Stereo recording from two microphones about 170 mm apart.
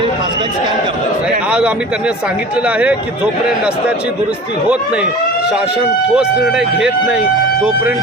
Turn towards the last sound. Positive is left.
turn(degrees=-5)  # may be behind; listen again after turning